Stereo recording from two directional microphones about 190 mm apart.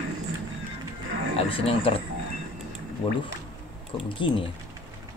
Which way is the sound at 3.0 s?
25° left (ahead or behind).